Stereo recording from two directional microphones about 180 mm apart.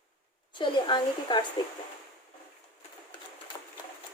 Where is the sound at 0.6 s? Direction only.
25° left (ahead or behind).